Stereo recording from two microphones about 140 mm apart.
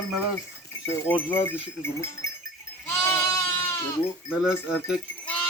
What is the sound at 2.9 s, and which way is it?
Goat, 20° left (ahead or behind).